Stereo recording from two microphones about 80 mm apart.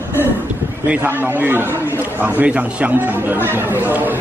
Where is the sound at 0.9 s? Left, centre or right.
Right.